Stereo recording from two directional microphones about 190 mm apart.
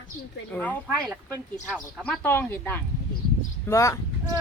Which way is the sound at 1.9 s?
5° left (ahead or behind).